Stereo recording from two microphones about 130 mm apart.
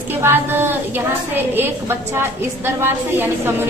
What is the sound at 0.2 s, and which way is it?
A woman's voice, 15° right (ahead or behind).